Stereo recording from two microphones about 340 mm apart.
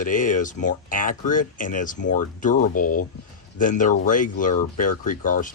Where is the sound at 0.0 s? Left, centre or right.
Left.